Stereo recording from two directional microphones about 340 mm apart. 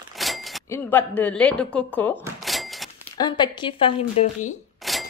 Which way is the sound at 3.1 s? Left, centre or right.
Centre.